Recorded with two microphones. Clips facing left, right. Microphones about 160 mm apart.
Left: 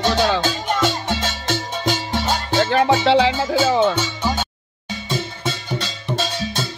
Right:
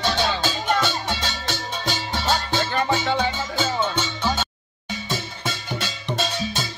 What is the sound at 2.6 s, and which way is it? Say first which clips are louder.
Music: left 6 dB; 70° left (ahead or behind).